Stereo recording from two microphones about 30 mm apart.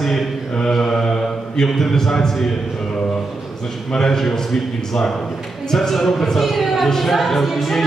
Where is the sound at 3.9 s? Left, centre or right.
Centre.